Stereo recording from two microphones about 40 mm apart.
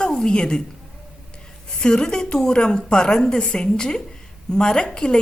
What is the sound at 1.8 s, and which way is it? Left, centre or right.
A woman's voice, left.